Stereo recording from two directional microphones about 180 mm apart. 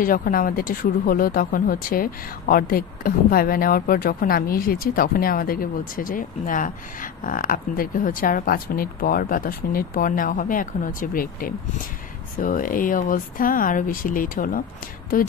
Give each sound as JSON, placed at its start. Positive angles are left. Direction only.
{"t": 0.0, "sound": "speech", "side_deg": 50}